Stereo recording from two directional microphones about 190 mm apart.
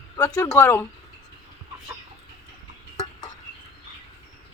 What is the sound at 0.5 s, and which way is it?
Speech, 10° left (ahead or behind).